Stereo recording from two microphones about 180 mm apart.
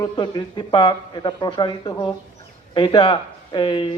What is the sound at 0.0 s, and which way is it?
A man's voice, 25° left (ahead or behind).